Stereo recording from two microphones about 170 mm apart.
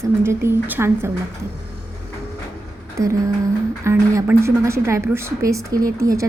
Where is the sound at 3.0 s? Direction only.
20° right (ahead or behind).